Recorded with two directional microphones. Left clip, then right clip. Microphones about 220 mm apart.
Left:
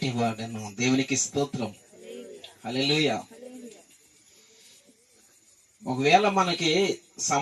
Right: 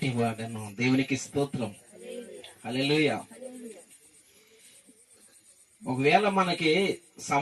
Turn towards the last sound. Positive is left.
turn(degrees=45)  # may be behind; listen again after turning